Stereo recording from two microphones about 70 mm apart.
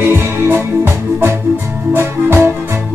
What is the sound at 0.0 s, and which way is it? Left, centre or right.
Music, right.